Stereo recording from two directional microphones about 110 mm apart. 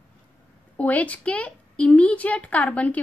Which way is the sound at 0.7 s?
15° left (ahead or behind).